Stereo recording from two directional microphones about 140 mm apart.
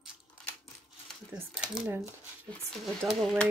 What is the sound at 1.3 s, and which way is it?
Speech, 5° right (ahead or behind).